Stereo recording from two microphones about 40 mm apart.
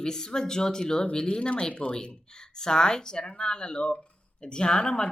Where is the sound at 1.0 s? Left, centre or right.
Left.